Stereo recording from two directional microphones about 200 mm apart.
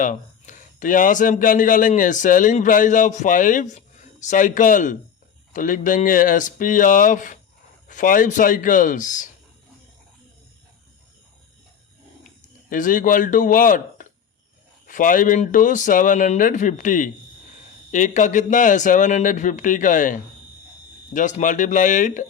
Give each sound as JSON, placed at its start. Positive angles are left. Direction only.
{"t": 0.0, "sound": "speech", "side_deg": 40}
{"t": 12.7, "sound": "speech", "side_deg": 40}